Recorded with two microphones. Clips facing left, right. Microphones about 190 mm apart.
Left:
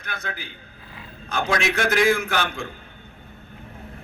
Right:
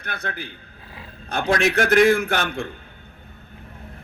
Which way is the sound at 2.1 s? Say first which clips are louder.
Right 2 dB; 40° right (ahead or behind).